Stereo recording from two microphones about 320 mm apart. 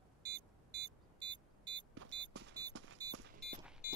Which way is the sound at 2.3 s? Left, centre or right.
Right.